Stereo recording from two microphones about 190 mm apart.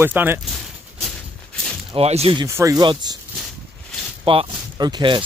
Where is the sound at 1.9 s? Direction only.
30° right (ahead or behind).